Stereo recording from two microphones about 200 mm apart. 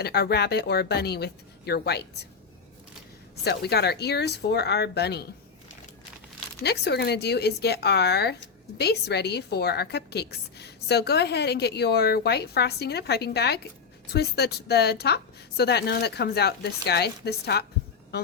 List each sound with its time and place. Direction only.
0.0 s a woman's voice: 50° left (ahead or behind)
3.4 s a woman's voice: 55° left (ahead or behind)
6.6 s a woman's voice: 55° left (ahead or behind)
18.1 s music: 55° left (ahead or behind)